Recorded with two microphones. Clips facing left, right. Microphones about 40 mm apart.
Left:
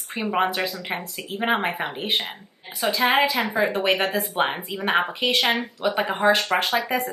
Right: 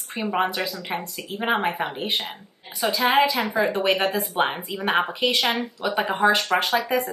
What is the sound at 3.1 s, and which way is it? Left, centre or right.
A woman's voice, centre.